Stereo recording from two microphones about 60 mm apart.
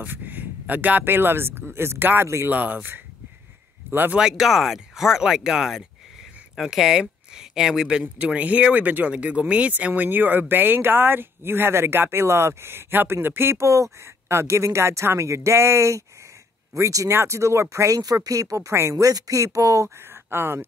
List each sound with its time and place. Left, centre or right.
0.0 s speech: right
2.4 s speech: right
3.8 s a sound: right
4.2 s speech: centre
8.0 s speech: right
13.6 s speech: right
17.1 s speech: right
19.0 s speech: right
20.0 s speech: right